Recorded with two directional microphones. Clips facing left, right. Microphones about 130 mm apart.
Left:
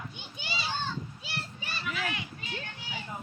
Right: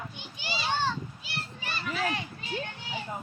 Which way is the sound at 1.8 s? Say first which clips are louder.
Right 4 dB; 35° right (ahead or behind).